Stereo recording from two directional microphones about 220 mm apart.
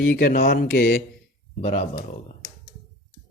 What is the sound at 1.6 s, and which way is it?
Speech, 25° left (ahead or behind).